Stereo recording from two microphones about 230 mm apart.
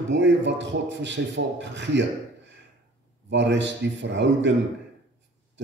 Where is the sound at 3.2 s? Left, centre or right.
Right.